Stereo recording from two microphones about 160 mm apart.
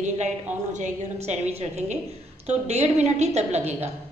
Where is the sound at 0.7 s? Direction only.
50° right (ahead or behind).